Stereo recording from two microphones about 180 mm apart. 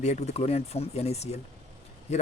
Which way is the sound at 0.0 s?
40° left (ahead or behind).